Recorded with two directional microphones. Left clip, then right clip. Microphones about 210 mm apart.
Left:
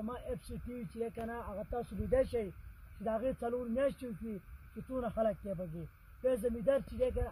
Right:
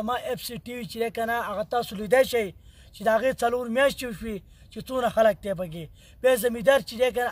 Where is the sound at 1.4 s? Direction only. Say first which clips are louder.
Right 14 dB; 25° right (ahead or behind).